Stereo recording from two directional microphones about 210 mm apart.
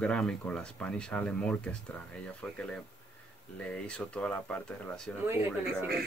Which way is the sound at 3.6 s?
5° left (ahead or behind).